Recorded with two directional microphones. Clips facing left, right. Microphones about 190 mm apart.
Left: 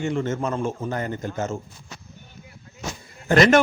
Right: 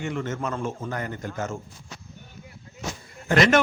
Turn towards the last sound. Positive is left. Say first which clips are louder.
# left 3 dB
turn(degrees=35)  # may be behind; listen again after turning